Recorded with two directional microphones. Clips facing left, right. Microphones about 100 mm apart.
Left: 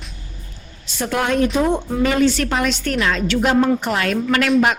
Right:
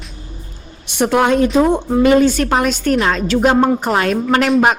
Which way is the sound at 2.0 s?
45° right (ahead or behind).